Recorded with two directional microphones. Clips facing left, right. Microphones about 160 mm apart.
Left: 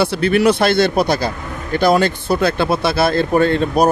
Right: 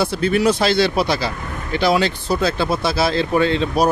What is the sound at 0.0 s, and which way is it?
Speech, 70° left (ahead or behind).